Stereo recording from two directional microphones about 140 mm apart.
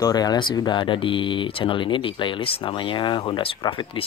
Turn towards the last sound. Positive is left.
turn(degrees=35)  # may be behind; listen again after turning